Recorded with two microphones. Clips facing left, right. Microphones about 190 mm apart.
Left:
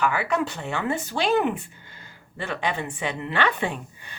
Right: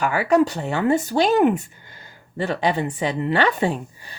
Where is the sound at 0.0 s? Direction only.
40° right (ahead or behind).